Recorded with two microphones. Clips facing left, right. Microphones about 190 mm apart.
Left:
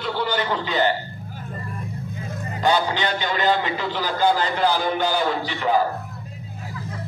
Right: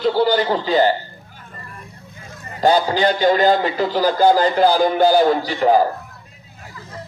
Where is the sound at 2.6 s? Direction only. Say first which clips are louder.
Right 6 dB; 35° right (ahead or behind).